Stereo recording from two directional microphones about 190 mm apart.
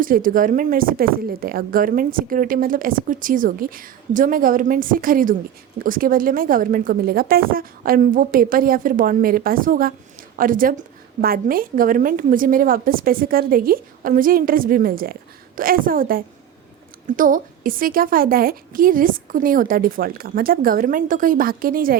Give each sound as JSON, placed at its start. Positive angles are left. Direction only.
{"t": 0.0, "sound": "a woman's voice", "side_deg": -45}